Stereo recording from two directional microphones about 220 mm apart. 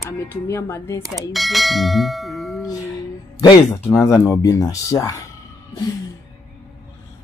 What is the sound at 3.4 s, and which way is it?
A woman's voice, 20° left (ahead or behind).